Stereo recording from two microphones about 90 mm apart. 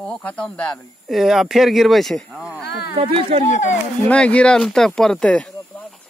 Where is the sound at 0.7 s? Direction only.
Centre (ahead or behind).